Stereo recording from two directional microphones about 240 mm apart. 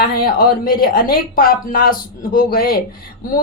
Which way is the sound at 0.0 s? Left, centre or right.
Left.